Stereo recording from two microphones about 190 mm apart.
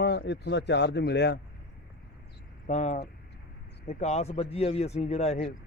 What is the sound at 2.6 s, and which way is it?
A man's voice, 40° left (ahead or behind).